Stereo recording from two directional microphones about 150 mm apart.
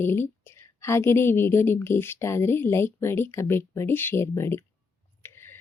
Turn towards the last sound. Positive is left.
turn(degrees=15)  # may be behind; listen again after turning